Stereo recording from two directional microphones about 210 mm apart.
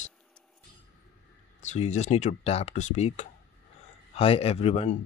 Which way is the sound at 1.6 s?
35° left (ahead or behind).